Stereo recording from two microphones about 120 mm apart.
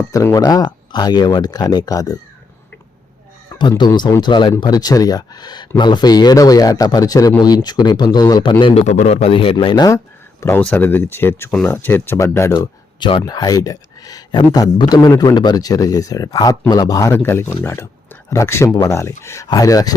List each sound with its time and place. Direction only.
0.1 s speech: 30° left (ahead or behind)
3.5 s speech: 35° left (ahead or behind)
8.7 s speech: 70° left (ahead or behind); by 9.9 s 40° left (ahead or behind)
10.6 s speech: 10° left (ahead or behind)
12.5 s speech: 45° left (ahead or behind)
13.2 s speech: 35° left (ahead or behind)
17.1 s speech: 20° left (ahead or behind)